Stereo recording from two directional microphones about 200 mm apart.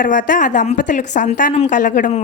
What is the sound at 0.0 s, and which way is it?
A woman's voice, 40° left (ahead or behind).